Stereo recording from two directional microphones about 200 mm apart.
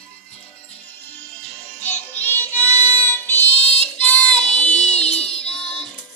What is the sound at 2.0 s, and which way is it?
Music, 10° left (ahead or behind).